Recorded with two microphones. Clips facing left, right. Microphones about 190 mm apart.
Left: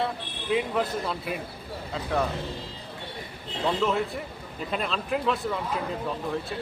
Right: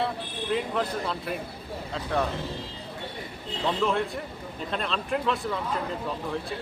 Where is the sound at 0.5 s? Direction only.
5° left (ahead or behind).